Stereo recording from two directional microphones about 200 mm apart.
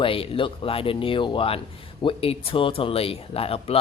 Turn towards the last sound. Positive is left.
turn(degrees=30)  # may be behind; listen again after turning